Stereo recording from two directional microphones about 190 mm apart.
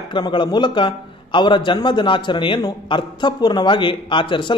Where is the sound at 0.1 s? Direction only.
25° left (ahead or behind).